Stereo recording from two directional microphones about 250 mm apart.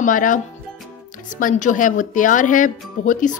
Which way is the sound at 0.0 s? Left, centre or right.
Left.